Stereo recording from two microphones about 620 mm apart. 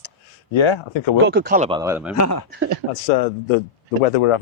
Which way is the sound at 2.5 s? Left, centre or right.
Centre.